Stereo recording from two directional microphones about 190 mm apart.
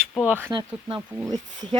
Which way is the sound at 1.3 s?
20° right (ahead or behind).